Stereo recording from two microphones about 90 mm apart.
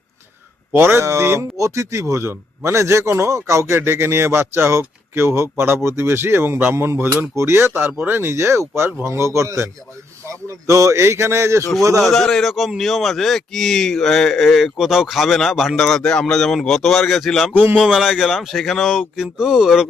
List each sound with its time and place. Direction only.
0.7 s speech: 25° right (ahead or behind)
12.0 s speech: centre (ahead or behind)
17.5 s speech: 20° right (ahead or behind)
17.8 s speech: 5° right (ahead or behind)